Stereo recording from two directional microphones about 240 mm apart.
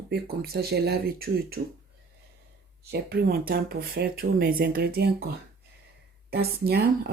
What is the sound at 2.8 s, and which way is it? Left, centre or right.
Speech, right.